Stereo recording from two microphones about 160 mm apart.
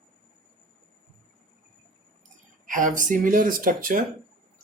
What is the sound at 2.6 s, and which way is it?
Speech, 55° right (ahead or behind).